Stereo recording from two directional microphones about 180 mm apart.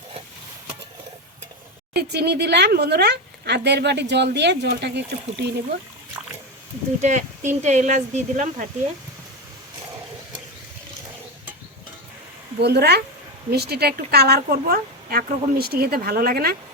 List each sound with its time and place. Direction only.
2.0 s speech: 65° right (ahead or behind)
7.0 s speech: 40° right (ahead or behind)
12.5 s speech: 65° right (ahead or behind)